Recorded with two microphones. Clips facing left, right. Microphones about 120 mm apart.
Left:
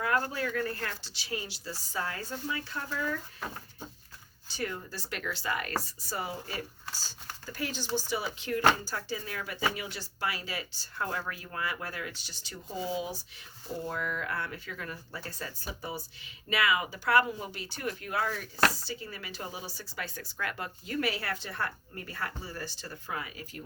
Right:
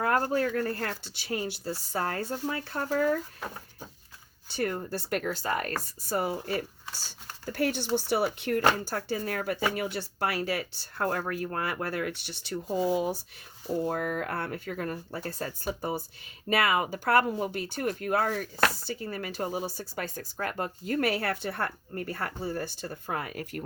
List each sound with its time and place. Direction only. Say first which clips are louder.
0.0 s speech: right 5 dB; 45° right (ahead or behind)
4.4 s speech: right 6 dB; 55° right (ahead or behind)
5.8 s speech: right 7 dB; 50° right (ahead or behind)
7.4 s speech: right 8 dB; 60° right (ahead or behind)